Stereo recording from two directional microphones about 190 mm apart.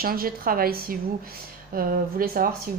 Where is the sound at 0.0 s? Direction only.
50° right (ahead or behind).